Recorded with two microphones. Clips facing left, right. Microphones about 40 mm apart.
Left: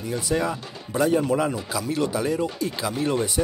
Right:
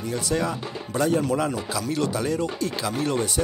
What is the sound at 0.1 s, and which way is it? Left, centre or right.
Speech, centre.